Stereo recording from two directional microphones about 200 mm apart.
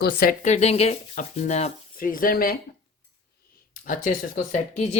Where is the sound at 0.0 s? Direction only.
50° left (ahead or behind).